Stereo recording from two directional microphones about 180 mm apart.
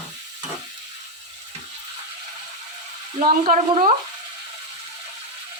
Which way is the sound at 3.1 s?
45° right (ahead or behind).